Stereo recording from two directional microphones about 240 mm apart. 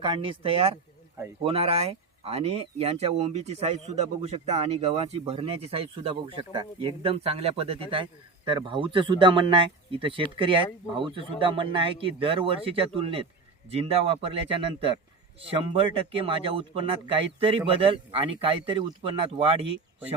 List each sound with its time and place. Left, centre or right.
0.0 s speech: right